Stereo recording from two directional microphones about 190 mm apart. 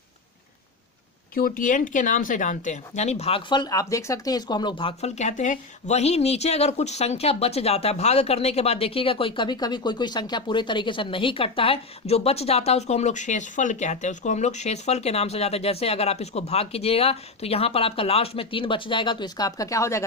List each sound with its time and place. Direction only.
1.3 s speech: 50° left (ahead or behind); by 20.1 s 15° left (ahead or behind)